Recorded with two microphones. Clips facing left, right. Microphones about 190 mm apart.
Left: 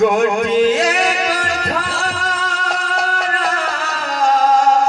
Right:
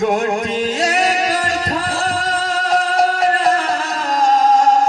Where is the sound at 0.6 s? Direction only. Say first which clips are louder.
Left 3 dB; 40° right (ahead or behind).